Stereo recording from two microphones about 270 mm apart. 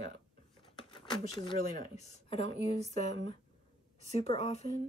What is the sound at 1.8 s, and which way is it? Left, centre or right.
Speech, left.